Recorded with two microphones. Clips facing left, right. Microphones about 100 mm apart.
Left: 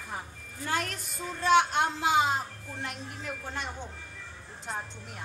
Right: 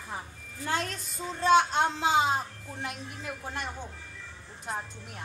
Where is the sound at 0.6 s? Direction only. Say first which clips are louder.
Right 1 dB; 25° right (ahead or behind).